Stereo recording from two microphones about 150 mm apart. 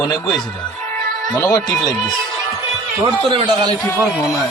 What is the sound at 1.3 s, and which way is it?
Speech, 20° left (ahead or behind).